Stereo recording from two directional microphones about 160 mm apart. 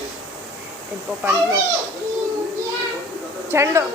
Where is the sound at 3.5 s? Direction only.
15° right (ahead or behind).